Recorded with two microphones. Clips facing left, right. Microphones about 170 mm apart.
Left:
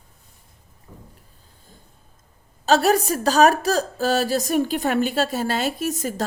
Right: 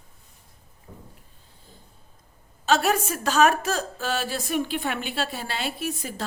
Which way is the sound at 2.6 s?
35° left (ahead or behind).